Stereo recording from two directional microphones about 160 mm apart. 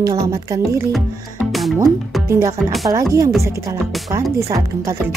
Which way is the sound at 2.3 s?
20° right (ahead or behind).